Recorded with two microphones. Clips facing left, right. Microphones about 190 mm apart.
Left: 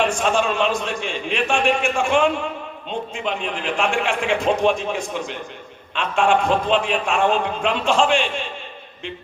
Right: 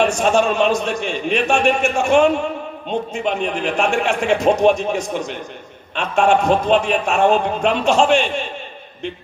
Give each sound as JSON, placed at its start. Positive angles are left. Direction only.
{"t": 0.0, "sound": "a man's voice", "side_deg": -40}